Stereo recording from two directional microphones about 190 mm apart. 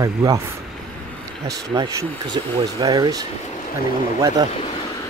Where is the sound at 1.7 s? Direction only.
25° right (ahead or behind).